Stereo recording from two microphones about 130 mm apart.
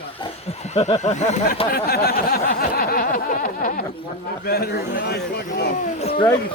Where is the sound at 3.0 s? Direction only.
90° left.